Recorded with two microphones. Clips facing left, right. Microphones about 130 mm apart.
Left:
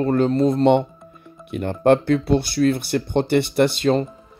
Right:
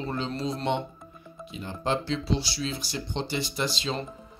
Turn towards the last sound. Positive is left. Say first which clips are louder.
# left 13 dB
turn(degrees=60)  # may be behind; listen again after turning